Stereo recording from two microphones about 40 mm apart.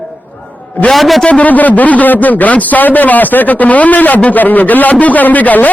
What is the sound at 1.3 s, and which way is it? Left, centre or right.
A man's voice, left.